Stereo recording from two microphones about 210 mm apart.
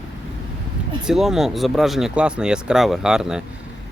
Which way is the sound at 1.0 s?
Centre (ahead or behind).